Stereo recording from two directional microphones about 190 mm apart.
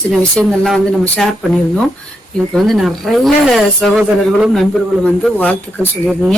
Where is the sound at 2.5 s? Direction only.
Centre (ahead or behind).